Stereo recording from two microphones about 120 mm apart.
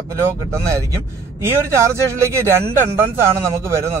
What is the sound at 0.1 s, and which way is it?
A man's voice, 25° right (ahead or behind).